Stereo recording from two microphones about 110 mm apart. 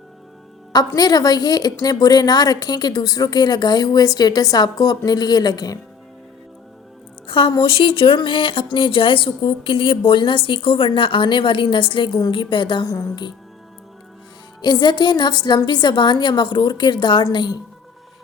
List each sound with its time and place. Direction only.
0.7 s a woman's voice: 35° left (ahead or behind)
7.3 s music: 50° left (ahead or behind)
7.6 s speech: 55° left (ahead or behind)
14.6 s a woman's voice: 40° left (ahead or behind)